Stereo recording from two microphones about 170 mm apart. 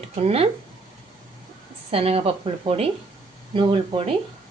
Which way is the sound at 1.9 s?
35° right (ahead or behind).